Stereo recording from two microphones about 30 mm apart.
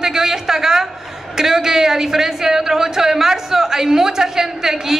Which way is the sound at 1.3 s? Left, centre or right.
Centre.